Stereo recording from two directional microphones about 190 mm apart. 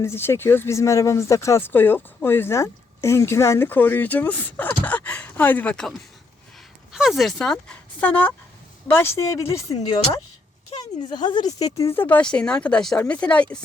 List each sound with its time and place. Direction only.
0.0 s speech: 10° left (ahead or behind)
6.9 s speech: centre (ahead or behind); by 9.7 s 15° left (ahead or behind)
11.0 s speech: 20° left (ahead or behind); by 13.6 s 5° left (ahead or behind)